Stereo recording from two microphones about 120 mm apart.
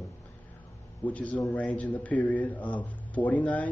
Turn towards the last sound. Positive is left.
turn(degrees=10)  # may be behind; listen again after turning